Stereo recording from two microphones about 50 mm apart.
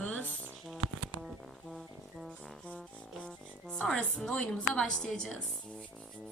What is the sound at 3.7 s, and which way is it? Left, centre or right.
A woman's voice, left.